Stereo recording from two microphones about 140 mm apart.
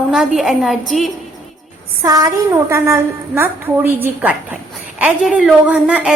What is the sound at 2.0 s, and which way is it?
A woman's voice, 25° right (ahead or behind).